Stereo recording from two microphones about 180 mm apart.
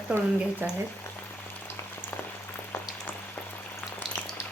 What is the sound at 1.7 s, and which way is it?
Boiling, 10° left (ahead or behind).